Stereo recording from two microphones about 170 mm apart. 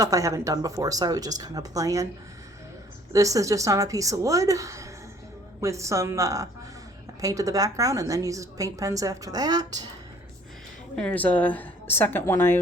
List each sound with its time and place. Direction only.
0.0 s a woman's voice: 20° right (ahead or behind)
3.1 s a woman's voice: 20° right (ahead or behind)
10.9 s a woman's voice: 10° left (ahead or behind)